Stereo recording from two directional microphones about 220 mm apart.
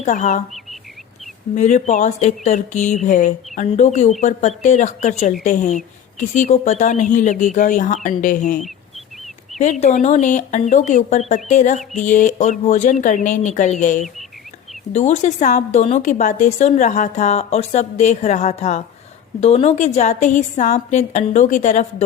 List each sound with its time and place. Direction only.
0.0 s speech: 35° left (ahead or behind)
1.5 s speech: 35° left (ahead or behind)
9.6 s speech: 35° left (ahead or behind)